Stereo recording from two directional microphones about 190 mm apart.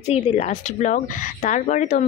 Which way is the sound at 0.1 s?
40° left (ahead or behind).